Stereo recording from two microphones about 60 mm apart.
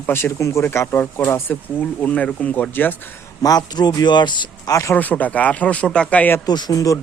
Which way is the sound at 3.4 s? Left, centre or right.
Left.